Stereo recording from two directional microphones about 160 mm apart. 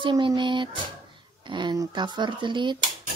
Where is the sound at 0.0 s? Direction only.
25° right (ahead or behind).